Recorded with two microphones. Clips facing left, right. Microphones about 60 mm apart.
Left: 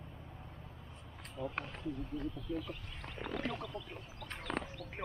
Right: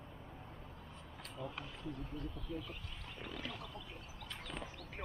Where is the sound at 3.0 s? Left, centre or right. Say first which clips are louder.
Left 7 dB; left.